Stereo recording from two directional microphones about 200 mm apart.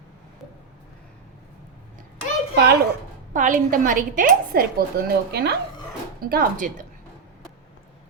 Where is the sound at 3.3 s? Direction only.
40° right (ahead or behind).